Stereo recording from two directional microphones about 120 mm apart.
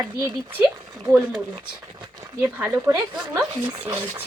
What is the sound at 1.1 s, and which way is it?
Speech, 25° right (ahead or behind).